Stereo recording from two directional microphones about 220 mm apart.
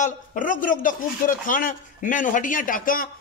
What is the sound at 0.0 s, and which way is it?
Speech, 35° left (ahead or behind).